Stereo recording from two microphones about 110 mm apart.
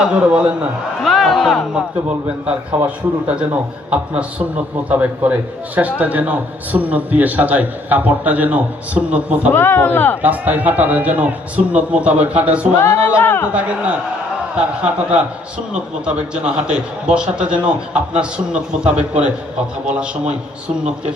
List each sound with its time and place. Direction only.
0.0 s a man's voice: 10° right (ahead or behind)
2.5 s a man's voice: 10° right (ahead or behind)
9.5 s speech: 20° left (ahead or behind)
10.2 s a man's voice: 15° right (ahead or behind)
12.8 s speech: 25° left (ahead or behind)
14.5 s a man's voice: 10° right (ahead or behind)